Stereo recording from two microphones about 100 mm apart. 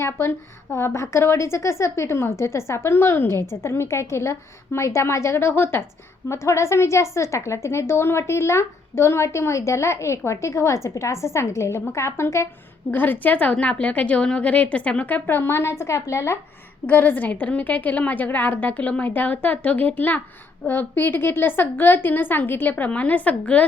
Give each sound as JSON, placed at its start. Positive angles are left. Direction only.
{"t": 0.0, "sound": "a woman's voice", "side_deg": 25}
{"t": 16.8, "sound": "a woman's voice", "side_deg": 15}